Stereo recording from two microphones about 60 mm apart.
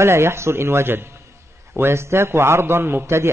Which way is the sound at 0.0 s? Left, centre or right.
Right.